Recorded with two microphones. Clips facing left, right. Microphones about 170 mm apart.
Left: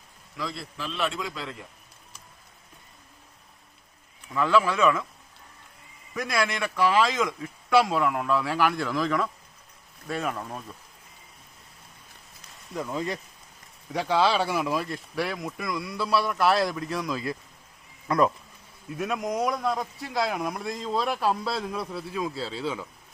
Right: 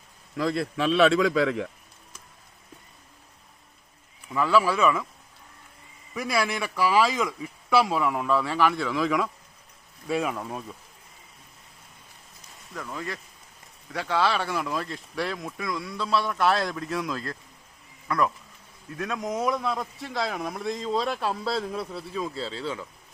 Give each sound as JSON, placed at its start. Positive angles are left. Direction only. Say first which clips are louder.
{"t": 0.3, "sound": "a man's voice", "louder": "right 9 dB", "side_deg": -60}
{"t": 4.4, "sound": "speech", "louder": "even", "side_deg": -5}
{"t": 6.1, "sound": "speech", "louder": "right 1 dB", "side_deg": -5}
{"t": 12.7, "sound": "speech", "louder": "left 5 dB", "side_deg": 20}
{"t": 18.1, "sound": "speech", "louder": "left 3 dB", "side_deg": 20}
{"t": 18.9, "sound": "speech", "louder": "left 2 dB", "side_deg": 10}